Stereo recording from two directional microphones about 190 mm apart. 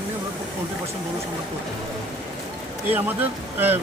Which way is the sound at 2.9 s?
10° right (ahead or behind).